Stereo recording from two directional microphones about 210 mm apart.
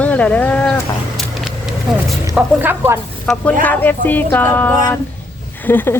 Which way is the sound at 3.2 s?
5° left (ahead or behind).